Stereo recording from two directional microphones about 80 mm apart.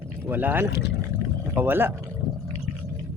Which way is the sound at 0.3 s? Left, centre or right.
Right.